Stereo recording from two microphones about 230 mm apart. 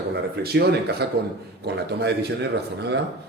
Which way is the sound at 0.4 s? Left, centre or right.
Right.